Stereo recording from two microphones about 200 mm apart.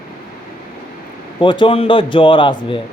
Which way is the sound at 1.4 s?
25° left (ahead or behind).